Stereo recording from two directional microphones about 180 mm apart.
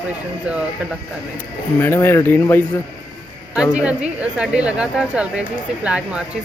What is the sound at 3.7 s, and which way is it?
Speech, 5° right (ahead or behind).